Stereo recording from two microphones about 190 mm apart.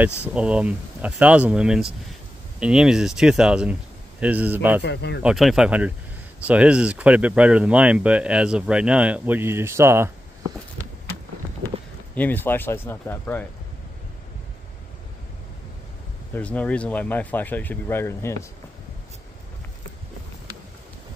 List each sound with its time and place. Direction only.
0.3 s speech: 5° right (ahead or behind)
4.8 s speech: 65° left (ahead or behind)
5.2 s speech: centre (ahead or behind)
12.2 s speech: 10° left (ahead or behind)
16.3 s speech: 5° left (ahead or behind)